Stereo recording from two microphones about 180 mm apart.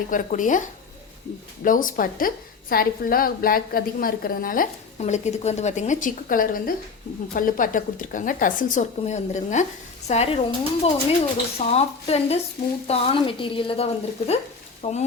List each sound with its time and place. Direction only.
0.1 s a woman's voice: 45° left (ahead or behind)
1.6 s a woman's voice: 50° left (ahead or behind)
4.9 s a woman's voice: 40° left (ahead or behind)